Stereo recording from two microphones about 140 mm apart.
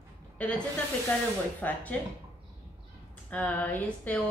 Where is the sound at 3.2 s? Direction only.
10° left (ahead or behind).